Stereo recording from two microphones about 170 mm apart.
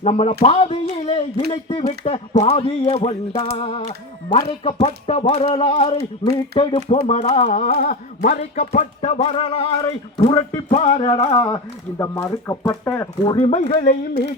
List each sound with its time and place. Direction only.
0.0 s speech: 35° left (ahead or behind); by 8.4 s 55° left (ahead or behind)
8.4 s speech: 45° left (ahead or behind); by 13.6 s 25° left (ahead or behind)
13.6 s speech: 40° left (ahead or behind)